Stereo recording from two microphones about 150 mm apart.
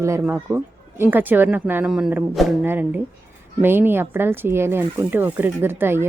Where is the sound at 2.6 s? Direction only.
10° right (ahead or behind).